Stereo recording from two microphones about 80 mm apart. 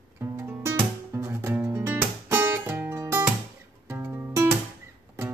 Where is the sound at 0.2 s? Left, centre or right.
Right.